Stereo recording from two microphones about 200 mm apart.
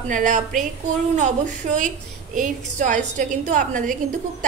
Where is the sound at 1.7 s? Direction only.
40° right (ahead or behind).